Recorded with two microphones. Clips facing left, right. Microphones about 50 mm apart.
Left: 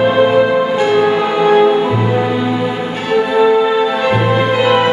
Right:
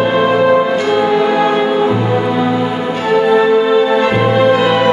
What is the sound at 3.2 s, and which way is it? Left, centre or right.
Music, centre.